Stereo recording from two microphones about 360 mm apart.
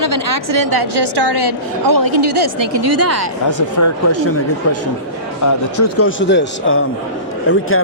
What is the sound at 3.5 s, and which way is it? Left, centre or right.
Speech, left.